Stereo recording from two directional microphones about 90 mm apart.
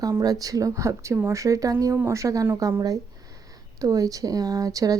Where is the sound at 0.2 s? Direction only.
45° right (ahead or behind).